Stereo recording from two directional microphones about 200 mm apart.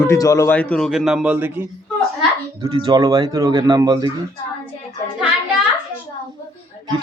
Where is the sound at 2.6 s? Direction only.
20° right (ahead or behind).